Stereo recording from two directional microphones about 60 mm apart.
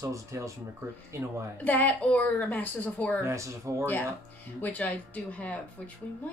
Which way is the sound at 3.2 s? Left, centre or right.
Right.